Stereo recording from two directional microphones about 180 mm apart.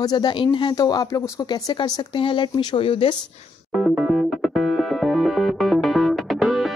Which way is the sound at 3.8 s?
Centre (ahead or behind).